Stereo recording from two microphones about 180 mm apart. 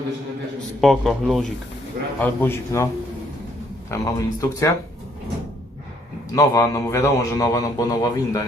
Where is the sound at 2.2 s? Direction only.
15° left (ahead or behind).